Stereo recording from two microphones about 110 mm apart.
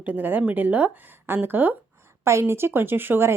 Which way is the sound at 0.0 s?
15° right (ahead or behind).